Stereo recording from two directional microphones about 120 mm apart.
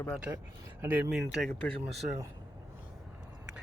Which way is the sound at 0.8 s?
15° right (ahead or behind).